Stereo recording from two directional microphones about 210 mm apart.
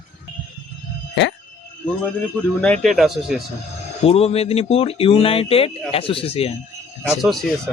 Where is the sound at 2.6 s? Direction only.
5° left (ahead or behind).